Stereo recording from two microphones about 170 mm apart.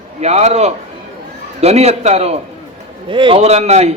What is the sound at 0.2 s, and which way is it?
A man's voice, 40° right (ahead or behind).